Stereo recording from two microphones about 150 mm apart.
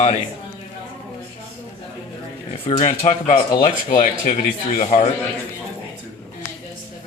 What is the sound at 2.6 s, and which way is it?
Speech, 50° left (ahead or behind).